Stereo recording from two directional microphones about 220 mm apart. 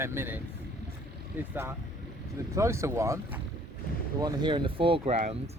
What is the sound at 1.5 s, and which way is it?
Speech, 10° right (ahead or behind).